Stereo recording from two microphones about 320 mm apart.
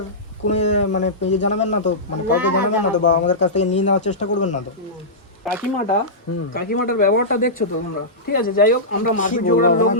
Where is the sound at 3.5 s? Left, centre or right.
Left.